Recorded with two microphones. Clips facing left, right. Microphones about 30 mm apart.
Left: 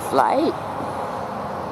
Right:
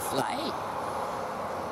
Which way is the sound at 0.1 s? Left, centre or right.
Left.